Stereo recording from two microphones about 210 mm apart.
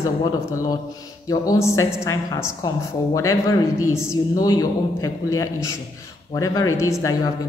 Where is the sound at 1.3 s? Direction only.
15° left (ahead or behind).